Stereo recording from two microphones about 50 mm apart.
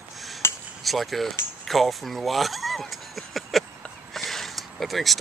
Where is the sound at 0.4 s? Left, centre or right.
Left.